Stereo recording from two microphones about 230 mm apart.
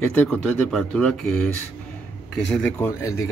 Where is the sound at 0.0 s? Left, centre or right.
Centre.